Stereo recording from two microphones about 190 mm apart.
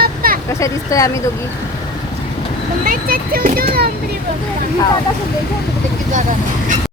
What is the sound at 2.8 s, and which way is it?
A child's voice, 50° right (ahead or behind).